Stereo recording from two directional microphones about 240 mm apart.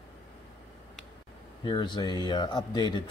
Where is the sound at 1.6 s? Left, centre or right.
Centre.